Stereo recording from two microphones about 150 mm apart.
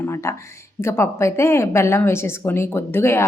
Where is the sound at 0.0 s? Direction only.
20° left (ahead or behind).